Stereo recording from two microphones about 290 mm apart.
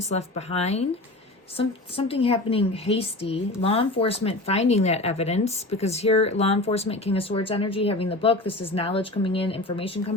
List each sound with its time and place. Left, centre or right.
0.0 s a woman's voice: left